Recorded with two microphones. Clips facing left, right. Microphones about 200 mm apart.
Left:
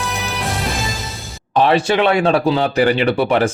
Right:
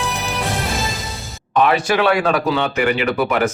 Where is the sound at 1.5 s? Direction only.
30° left (ahead or behind).